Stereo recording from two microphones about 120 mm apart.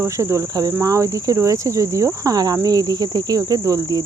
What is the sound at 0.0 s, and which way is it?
Speech, 25° right (ahead or behind).